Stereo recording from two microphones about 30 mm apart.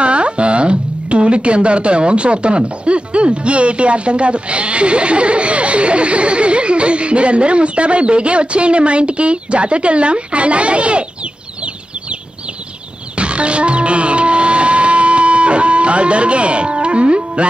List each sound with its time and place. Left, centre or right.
0.0 s speech: right
13.1 s music: right